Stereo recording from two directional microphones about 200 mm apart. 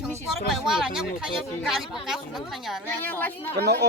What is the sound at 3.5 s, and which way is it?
Speech, 55° right (ahead or behind).